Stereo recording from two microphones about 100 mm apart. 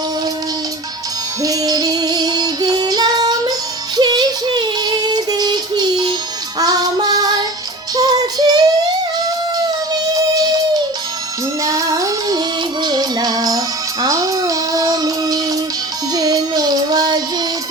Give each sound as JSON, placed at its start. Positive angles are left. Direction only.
{"t": 1.4, "sound": "female singing", "side_deg": -40}
{"t": 3.9, "sound": "child singing", "side_deg": -45}
{"t": 6.6, "sound": "synthetic singing", "side_deg": -40}
{"t": 7.1, "sound": "child singing", "side_deg": -40}
{"t": 9.9, "sound": "music", "side_deg": -40}